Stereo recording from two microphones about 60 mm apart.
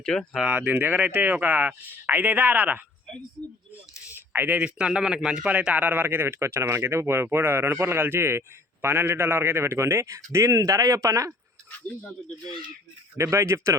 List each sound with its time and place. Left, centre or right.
0.0 s speech: centre
0.4 s speech: right
4.1 s a sound: right
4.5 s speech: centre; by 10.2 s right
10.3 s a man's voice: right
13.1 s speech: right